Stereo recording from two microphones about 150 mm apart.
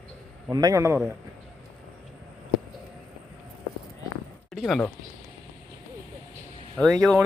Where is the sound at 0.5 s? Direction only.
25° right (ahead or behind).